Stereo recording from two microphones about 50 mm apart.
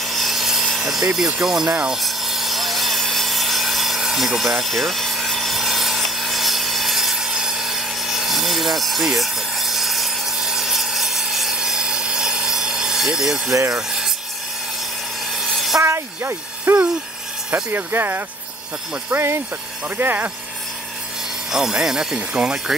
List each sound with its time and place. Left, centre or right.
0.0 s helicopter: centre
0.7 s speech: centre
2.0 s sawing: centre
13.7 s rub: centre
15.3 s train: centre
15.8 s a sound: right
17.6 s speech: right
20.0 s speech: right
21.5 s speech: centre